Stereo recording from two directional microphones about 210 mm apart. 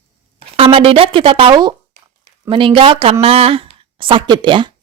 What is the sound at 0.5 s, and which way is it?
Speech, 25° right (ahead or behind).